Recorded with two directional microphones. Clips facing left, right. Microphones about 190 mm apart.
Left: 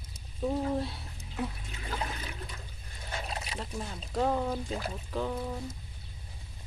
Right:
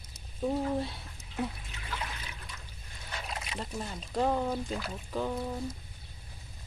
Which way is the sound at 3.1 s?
35° left (ahead or behind).